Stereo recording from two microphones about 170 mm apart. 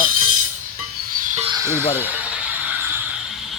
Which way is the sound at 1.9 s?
10° right (ahead or behind).